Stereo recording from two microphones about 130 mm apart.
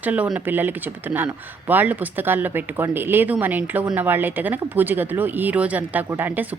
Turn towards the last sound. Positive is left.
turn(degrees=-15)  # may be behind; listen again after turning